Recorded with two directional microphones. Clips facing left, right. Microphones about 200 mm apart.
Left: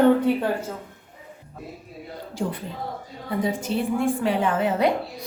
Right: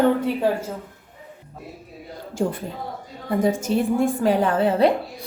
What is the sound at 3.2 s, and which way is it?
A woman's voice, 45° right (ahead or behind).